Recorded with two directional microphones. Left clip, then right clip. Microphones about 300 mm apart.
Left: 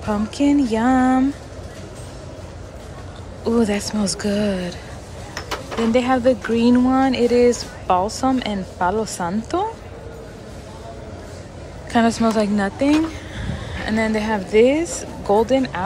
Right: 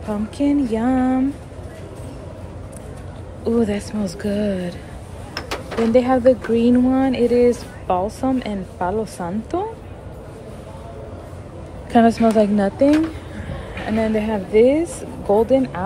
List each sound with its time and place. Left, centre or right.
0.0 s speech: centre
3.4 s speech: centre
5.9 s speech: centre
11.9 s speech: centre